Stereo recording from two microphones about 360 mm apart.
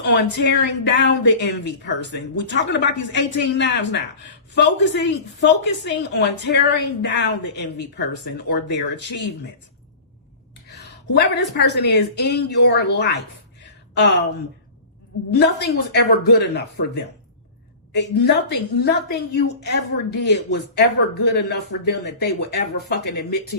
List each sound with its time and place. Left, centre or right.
0.1 s a woman's voice: left
10.7 s a woman's voice: left
15.3 s a woman's voice: left